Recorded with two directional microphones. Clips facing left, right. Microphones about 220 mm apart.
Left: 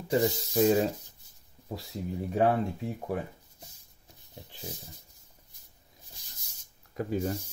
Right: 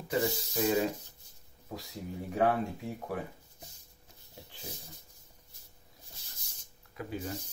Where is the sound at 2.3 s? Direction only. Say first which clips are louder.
Left 3 dB; 30° left (ahead or behind).